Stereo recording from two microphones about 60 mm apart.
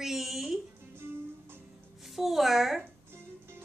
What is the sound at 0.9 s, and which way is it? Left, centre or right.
Music, right.